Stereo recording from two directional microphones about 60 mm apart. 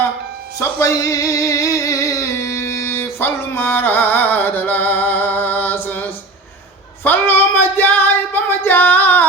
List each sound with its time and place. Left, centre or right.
0.6 s music: left
7.0 s singing: left